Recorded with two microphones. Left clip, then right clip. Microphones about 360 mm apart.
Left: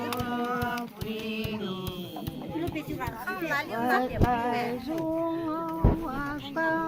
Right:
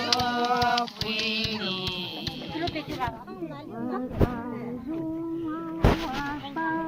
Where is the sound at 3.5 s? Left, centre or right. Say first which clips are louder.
Left 10 dB; left.